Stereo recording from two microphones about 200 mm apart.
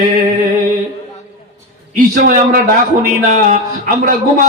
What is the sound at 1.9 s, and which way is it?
A man's voice, 45° right (ahead or behind).